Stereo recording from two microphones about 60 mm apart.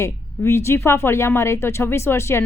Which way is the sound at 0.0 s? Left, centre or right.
Left.